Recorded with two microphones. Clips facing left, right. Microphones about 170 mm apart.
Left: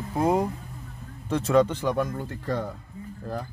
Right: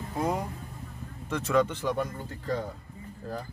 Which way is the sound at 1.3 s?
35° left (ahead or behind).